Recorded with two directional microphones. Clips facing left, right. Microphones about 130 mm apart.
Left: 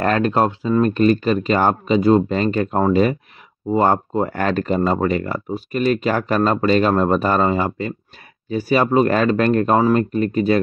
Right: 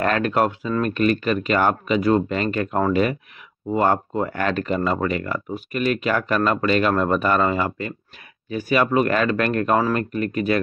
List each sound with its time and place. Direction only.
0.0 s speech: 30° left (ahead or behind)